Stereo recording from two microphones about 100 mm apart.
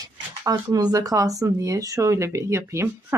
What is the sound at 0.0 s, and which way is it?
Speech, 35° right (ahead or behind).